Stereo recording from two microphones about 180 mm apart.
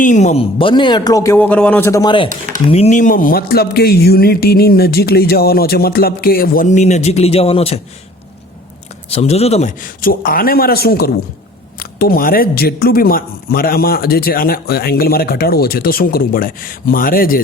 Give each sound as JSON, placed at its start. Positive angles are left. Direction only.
{"t": 0.0, "sound": "speech", "side_deg": 40}
{"t": 0.6, "sound": "a man's voice", "side_deg": 25}
{"t": 9.0, "sound": "a man's voice", "side_deg": 35}